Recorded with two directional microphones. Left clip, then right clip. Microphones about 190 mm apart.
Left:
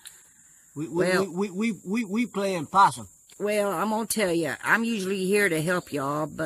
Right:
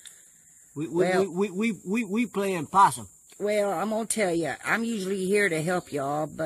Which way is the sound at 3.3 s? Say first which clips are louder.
Even; 25° left (ahead or behind).